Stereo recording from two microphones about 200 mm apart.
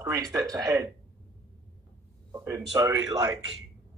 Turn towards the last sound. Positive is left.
turn(degrees=-20)  # may be behind; listen again after turning